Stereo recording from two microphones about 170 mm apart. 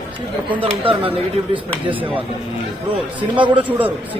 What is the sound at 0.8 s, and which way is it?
Speech, 30° right (ahead or behind).